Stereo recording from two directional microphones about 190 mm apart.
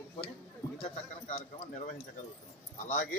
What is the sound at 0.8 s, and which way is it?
Speech, 35° left (ahead or behind).